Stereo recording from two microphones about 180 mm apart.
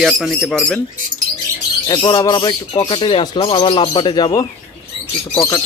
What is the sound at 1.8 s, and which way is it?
Speech, 25° left (ahead or behind).